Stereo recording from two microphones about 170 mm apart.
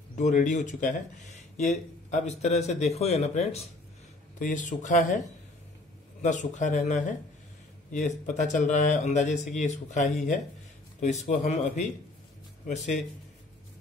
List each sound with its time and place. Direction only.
0.2 s speech: 45° left (ahead or behind)
4.4 s speech: 50° left (ahead or behind)
6.2 s speech: 45° left (ahead or behind)